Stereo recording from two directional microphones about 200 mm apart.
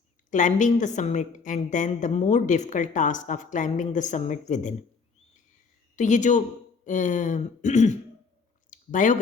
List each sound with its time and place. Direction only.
0.3 s a woman's voice: 40° left (ahead or behind)
6.0 s a woman's voice: 40° left (ahead or behind)
8.7 s a sound: 40° left (ahead or behind)